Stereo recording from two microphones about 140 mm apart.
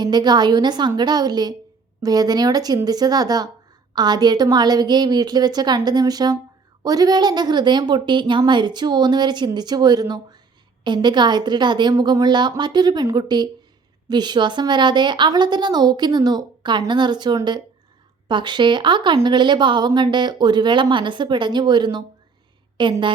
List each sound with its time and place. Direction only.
0.0 s a woman's voice: 30° right (ahead or behind)